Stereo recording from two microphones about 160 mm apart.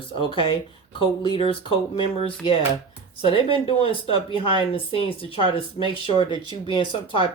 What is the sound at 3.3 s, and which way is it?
Speech, 35° left (ahead or behind).